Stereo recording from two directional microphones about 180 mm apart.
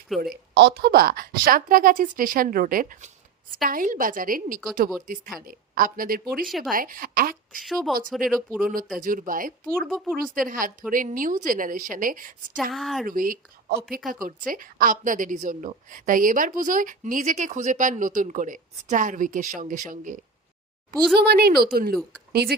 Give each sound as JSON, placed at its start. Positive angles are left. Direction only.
{"t": 0.1, "sound": "speech", "side_deg": 0}
{"t": 0.5, "sound": "a woman's voice", "side_deg": -65}
{"t": 7.5, "sound": "speech", "side_deg": 0}
{"t": 9.0, "sound": "a woman's voice", "side_deg": -50}
{"t": 9.8, "sound": "speech", "side_deg": 5}
{"t": 10.3, "sound": "a woman's voice", "side_deg": -50}
{"t": 12.7, "sound": "speech", "side_deg": 0}
{"t": 13.1, "sound": "a woman's voice", "side_deg": -50}
{"t": 21.2, "sound": "speech", "side_deg": -60}